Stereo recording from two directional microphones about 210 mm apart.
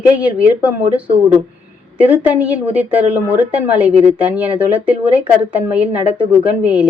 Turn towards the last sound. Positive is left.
turn(degrees=-5)  # may be behind; listen again after turning